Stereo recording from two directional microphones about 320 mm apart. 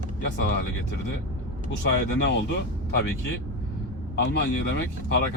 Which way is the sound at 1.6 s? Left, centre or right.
Left.